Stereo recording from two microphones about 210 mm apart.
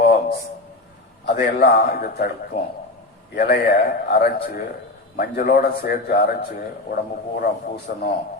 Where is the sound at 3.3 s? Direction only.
50° left (ahead or behind).